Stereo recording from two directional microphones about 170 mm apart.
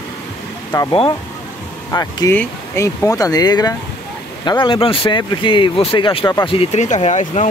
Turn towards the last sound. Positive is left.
turn(degrees=45)  # may be behind; listen again after turning